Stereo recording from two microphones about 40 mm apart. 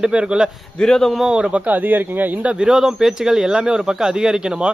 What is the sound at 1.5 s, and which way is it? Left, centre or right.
Speech, right.